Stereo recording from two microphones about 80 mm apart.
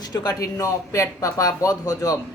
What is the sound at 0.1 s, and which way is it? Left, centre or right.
Speech, left.